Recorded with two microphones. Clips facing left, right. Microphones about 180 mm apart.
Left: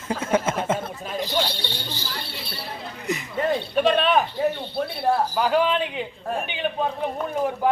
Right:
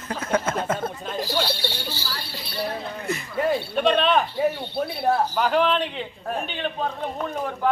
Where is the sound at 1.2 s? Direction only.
15° left (ahead or behind).